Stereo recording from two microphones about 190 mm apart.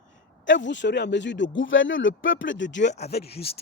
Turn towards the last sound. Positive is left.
turn(degrees=55)  # may be behind; listen again after turning